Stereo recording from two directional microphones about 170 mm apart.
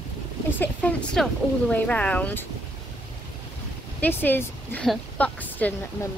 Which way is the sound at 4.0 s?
10° left (ahead or behind).